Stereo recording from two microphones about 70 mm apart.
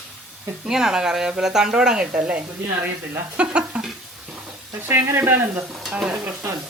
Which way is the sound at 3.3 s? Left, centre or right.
Centre.